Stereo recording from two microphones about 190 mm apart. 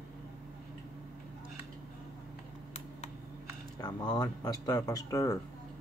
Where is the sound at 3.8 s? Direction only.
25° left (ahead or behind).